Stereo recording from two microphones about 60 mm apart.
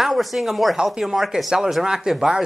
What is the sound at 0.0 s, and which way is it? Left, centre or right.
Speech, centre.